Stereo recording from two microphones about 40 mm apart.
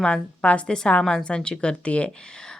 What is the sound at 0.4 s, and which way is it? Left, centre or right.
A woman's voice, left.